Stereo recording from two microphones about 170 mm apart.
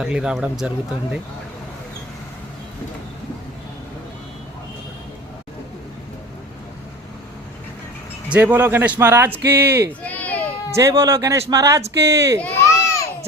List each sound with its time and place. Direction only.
0.0 s speech: 5° right (ahead or behind)
8.3 s speech: 10° right (ahead or behind)
10.0 s children playing: 10° left (ahead or behind)
10.8 s speech: 15° right (ahead or behind)
12.4 s a sound: 10° left (ahead or behind)